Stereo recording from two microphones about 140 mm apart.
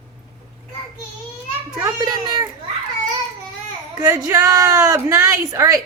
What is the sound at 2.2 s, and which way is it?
Speech, 30° right (ahead or behind).